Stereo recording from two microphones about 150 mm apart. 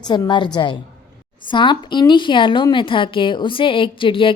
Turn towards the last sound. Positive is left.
turn(degrees=35)  # may be behind; listen again after turning